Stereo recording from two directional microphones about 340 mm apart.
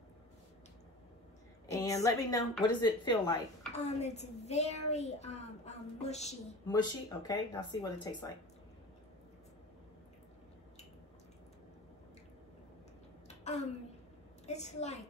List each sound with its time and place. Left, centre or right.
1.7 s a woman's voice: centre
13.3 s a sound: centre
14.4 s a child's voice: centre